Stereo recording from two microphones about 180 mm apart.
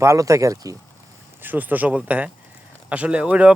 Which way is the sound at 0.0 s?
15° right (ahead or behind).